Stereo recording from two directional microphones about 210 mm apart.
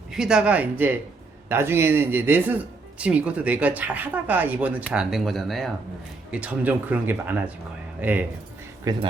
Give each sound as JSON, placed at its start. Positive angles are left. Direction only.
{"t": 0.1, "sound": "speech", "side_deg": -5}
{"t": 8.8, "sound": "speech", "side_deg": -15}